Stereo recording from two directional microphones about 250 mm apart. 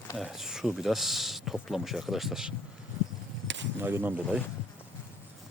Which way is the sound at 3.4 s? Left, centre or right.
Right.